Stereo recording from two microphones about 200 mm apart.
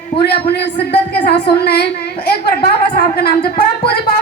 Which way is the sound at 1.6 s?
55° left (ahead or behind).